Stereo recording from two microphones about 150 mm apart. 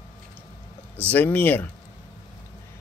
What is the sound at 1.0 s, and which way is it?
Speech, 10° left (ahead or behind).